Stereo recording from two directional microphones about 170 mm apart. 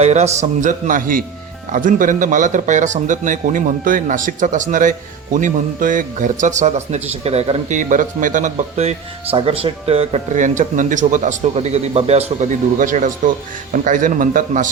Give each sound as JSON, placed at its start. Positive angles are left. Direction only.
{"t": 0.0, "sound": "a man's voice", "side_deg": -40}